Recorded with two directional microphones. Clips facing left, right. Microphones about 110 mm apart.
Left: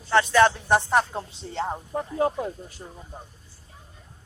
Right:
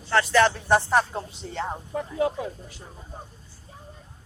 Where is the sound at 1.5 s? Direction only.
30° left (ahead or behind).